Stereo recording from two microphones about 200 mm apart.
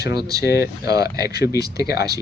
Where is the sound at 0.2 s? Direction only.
20° right (ahead or behind).